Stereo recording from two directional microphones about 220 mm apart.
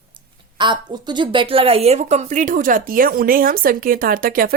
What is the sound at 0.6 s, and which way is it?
A woman's voice, 20° right (ahead or behind).